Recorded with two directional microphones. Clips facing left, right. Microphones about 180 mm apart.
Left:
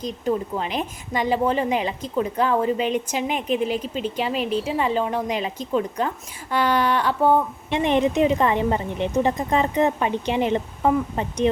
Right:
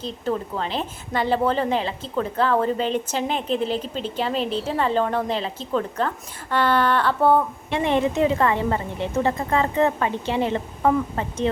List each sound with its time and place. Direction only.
0.0 s a woman's voice: 15° left (ahead or behind)